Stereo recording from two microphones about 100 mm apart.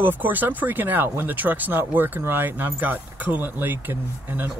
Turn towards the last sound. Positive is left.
turn(degrees=-20)  # may be behind; listen again after turning